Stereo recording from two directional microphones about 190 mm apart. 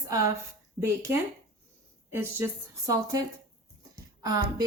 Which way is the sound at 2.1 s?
15° right (ahead or behind).